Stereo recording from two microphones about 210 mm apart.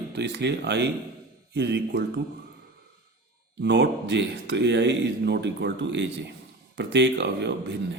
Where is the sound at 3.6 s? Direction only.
55° right (ahead or behind).